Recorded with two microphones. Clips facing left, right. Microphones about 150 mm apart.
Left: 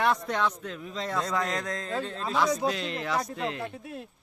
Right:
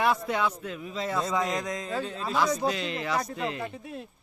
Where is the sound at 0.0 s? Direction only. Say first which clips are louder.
Even; 5° right (ahead or behind).